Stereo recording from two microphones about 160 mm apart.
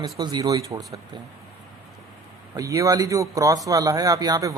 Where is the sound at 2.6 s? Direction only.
20° right (ahead or behind).